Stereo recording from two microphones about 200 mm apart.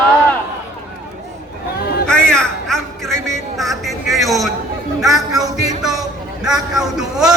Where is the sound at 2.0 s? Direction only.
5° left (ahead or behind).